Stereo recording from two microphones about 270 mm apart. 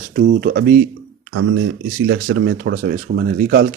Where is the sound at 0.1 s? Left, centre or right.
Right.